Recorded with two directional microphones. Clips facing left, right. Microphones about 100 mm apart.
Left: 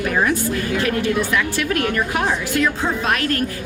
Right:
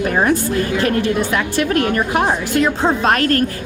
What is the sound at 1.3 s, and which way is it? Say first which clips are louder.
A woman's voice: right 3 dB; 35° right (ahead or behind).